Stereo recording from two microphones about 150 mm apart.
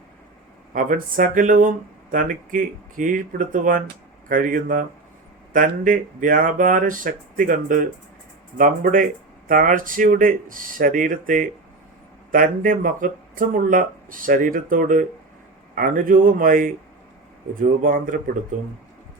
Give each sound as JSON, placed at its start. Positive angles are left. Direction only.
{"t": 0.7, "sound": "speech", "side_deg": -65}